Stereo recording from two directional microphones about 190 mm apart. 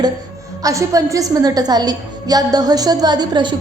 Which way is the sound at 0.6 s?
15° right (ahead or behind).